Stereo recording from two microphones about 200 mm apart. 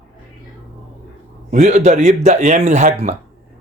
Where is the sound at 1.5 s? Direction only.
35° right (ahead or behind).